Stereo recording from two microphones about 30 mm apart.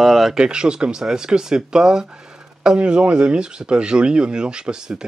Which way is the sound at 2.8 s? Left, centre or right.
Right.